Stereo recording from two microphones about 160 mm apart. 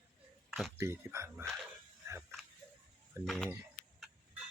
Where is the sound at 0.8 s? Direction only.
15° right (ahead or behind).